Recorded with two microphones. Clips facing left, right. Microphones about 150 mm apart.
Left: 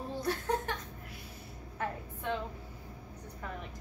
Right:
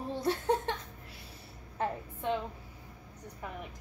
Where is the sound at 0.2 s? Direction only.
25° right (ahead or behind).